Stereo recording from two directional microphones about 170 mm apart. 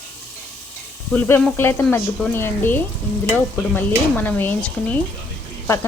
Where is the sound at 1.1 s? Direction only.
10° left (ahead or behind).